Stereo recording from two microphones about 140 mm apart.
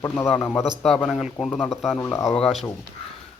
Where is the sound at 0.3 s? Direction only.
15° left (ahead or behind).